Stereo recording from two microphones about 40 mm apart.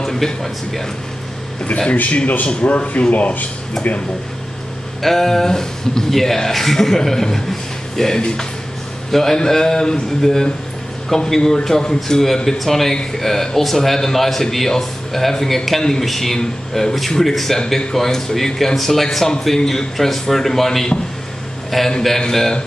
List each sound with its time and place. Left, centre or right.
0.0 s speech: centre
1.7 s speech: centre
2.0 s speech: left
5.0 s a man's voice: centre